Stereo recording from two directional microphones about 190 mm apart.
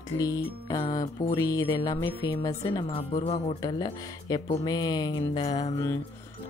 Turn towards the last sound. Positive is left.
turn(degrees=20)  # may be behind; listen again after turning